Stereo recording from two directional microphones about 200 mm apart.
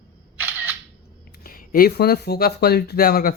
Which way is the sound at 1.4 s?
45° left (ahead or behind).